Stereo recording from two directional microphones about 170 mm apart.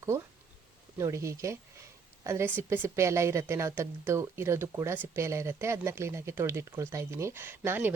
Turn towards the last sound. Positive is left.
turn(degrees=-10)  # may be behind; listen again after turning